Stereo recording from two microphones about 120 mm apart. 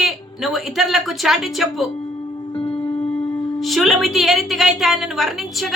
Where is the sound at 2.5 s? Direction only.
50° left (ahead or behind).